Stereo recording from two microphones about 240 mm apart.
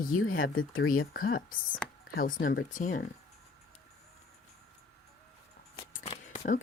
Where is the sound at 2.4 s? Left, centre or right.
Left.